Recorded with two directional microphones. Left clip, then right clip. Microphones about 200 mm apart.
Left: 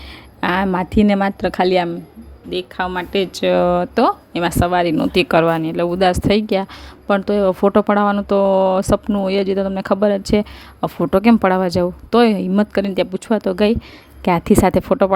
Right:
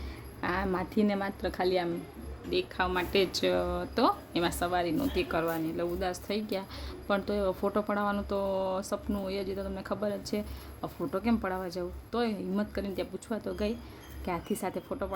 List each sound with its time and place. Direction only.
0.4 s speech: 40° left (ahead or behind)